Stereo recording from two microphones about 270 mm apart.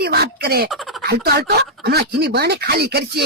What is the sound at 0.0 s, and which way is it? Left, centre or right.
Speech, right.